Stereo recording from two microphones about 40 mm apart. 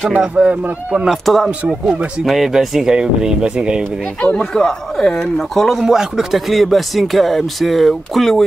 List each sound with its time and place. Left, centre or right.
0.4 s speech: right
1.2 s speech: centre; by 3.8 s right
4.4 s speech: centre
5.6 s speech: centre
5.9 s speech: centre
6.5 s speech: centre